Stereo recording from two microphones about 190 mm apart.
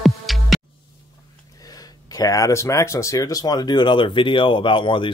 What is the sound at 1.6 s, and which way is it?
Speech, 20° left (ahead or behind).